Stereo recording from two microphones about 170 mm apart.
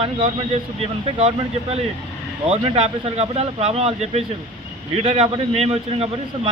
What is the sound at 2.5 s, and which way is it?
Speech, 35° right (ahead or behind).